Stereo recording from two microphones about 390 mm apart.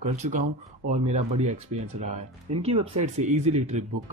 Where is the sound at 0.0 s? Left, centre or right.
Centre.